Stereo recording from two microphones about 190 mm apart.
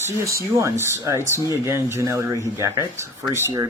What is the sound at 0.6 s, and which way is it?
Speech, 15° right (ahead or behind).